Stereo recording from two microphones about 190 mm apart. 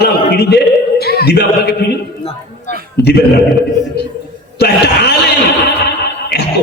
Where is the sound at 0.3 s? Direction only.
55° left (ahead or behind).